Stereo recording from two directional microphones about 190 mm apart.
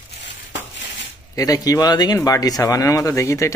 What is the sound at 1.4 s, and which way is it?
Speech, 20° left (ahead or behind).